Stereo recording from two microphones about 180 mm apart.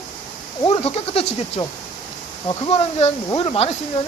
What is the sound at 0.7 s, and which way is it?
Speech, 35° left (ahead or behind).